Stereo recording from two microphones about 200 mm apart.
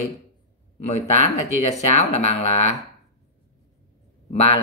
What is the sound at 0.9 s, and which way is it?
Speech, 35° left (ahead or behind).